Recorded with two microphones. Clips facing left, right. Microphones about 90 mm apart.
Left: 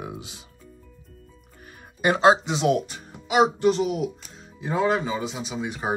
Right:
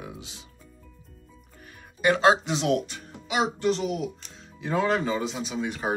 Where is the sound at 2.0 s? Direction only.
10° left (ahead or behind).